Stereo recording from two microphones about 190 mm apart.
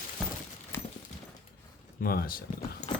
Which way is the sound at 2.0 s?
50° left (ahead or behind).